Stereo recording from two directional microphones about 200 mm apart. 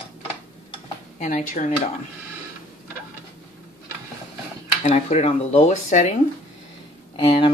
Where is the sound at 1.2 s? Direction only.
40° left (ahead or behind).